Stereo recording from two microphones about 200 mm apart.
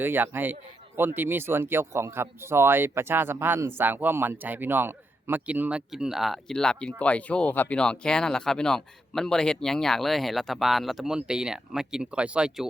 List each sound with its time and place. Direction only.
0.0 s speech: 10° right (ahead or behind)